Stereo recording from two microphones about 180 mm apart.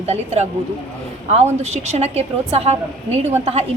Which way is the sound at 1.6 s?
35° right (ahead or behind).